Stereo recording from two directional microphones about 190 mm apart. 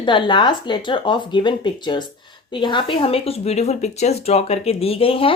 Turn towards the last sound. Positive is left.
turn(degrees=30)  # may be behind; listen again after turning